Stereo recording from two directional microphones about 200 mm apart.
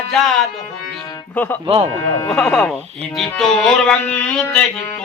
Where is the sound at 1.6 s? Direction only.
25° right (ahead or behind).